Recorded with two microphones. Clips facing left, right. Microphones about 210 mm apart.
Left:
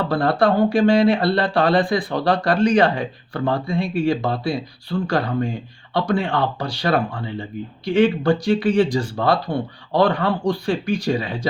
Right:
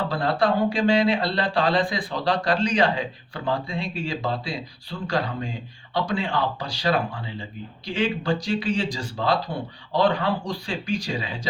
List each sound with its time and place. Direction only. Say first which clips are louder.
0.1 s speech: left 6 dB; 60° left (ahead or behind)